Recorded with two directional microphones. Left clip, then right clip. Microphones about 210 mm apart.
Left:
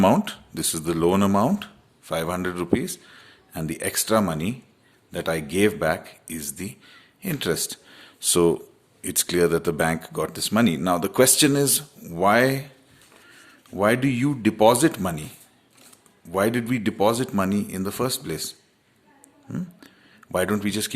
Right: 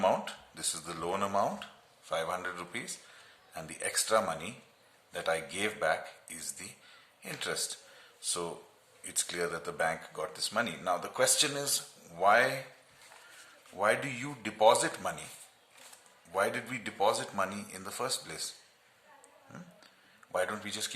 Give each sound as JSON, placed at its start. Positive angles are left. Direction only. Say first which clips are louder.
{"t": 0.0, "sound": "speech", "louder": "left 9 dB", "side_deg": 45}
{"t": 13.7, "sound": "speech", "louder": "left 9 dB", "side_deg": 45}
{"t": 16.3, "sound": "speech", "louder": "left 9 dB", "side_deg": 45}
{"t": 19.5, "sound": "a sound", "louder": "left 16 dB", "side_deg": 45}